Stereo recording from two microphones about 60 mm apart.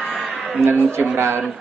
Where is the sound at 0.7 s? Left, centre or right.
Right.